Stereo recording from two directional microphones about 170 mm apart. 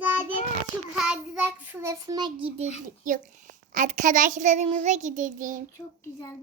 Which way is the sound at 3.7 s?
45° right (ahead or behind).